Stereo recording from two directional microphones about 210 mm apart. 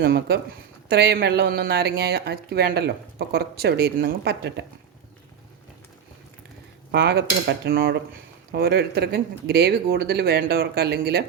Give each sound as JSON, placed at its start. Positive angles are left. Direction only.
{"t": 0.0, "sound": "speech", "side_deg": -50}
{"t": 6.9, "sound": "speech", "side_deg": -55}